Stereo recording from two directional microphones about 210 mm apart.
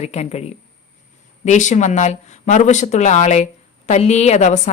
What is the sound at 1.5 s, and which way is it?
A woman's voice, 35° left (ahead or behind).